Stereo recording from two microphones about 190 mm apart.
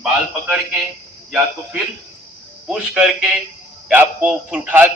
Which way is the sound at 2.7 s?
5° right (ahead or behind).